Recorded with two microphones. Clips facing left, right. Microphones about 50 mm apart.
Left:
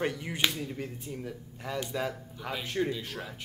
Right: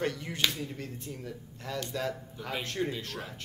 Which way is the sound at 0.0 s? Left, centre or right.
Centre.